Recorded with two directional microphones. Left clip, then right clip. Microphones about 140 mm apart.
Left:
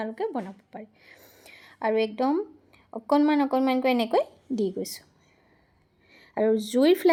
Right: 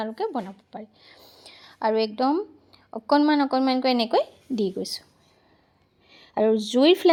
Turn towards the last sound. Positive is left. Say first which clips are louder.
# right 3 dB
turn(degrees=-30)  # may be behind; listen again after turning